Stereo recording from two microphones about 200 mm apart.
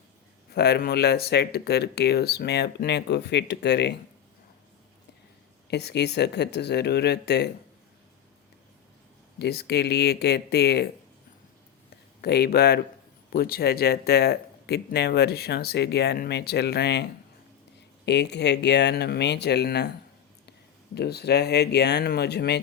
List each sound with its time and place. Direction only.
0.5 s speech: 55° left (ahead or behind)
5.7 s speech: 55° left (ahead or behind)
9.4 s speech: 55° left (ahead or behind)
12.2 s speech: 55° left (ahead or behind)
20.9 s speech: 55° left (ahead or behind)